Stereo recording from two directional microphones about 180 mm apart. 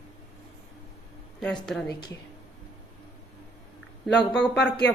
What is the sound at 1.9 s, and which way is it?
Speech, 20° left (ahead or behind).